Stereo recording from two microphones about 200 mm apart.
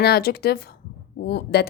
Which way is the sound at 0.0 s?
50° left (ahead or behind).